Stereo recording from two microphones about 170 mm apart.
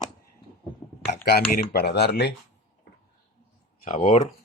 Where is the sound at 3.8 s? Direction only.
40° left (ahead or behind).